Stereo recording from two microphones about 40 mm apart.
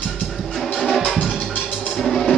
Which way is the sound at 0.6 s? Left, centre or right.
Centre.